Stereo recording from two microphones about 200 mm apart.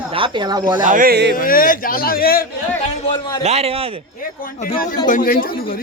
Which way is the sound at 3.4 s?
30° right (ahead or behind).